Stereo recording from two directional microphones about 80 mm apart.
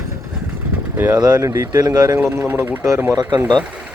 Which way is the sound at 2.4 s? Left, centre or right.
Right.